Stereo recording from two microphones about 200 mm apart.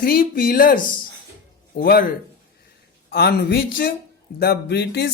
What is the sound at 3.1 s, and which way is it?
Speech, 55° left (ahead or behind).